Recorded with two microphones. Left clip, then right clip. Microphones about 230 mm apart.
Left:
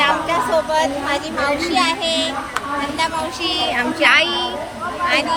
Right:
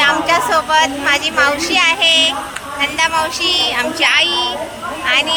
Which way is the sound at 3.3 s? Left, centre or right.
Centre.